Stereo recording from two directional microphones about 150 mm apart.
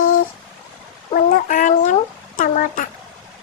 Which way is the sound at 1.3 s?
60° left (ahead or behind).